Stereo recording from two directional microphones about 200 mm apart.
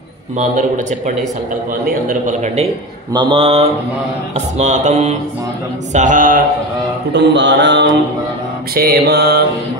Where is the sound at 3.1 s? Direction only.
25° right (ahead or behind).